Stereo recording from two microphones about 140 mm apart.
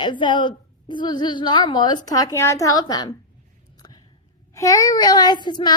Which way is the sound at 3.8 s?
30° left (ahead or behind).